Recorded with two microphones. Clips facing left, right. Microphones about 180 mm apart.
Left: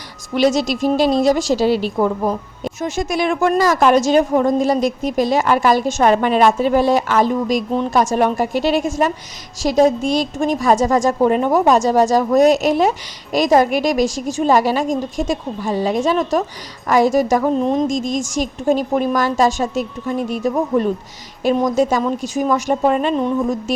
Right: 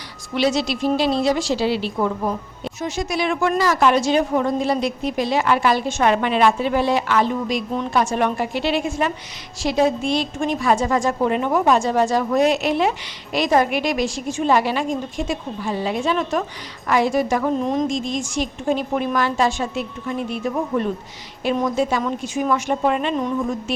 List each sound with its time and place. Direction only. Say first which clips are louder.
0.3 s a woman's voice: left 4 dB; 45° left (ahead or behind)